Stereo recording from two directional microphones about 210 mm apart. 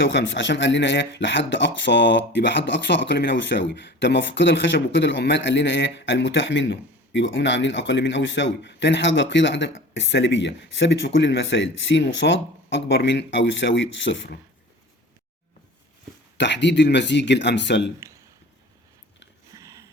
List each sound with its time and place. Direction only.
0.0 s speech: 60° left (ahead or behind)
16.4 s speech: 55° left (ahead or behind)
19.5 s a sound: 15° right (ahead or behind)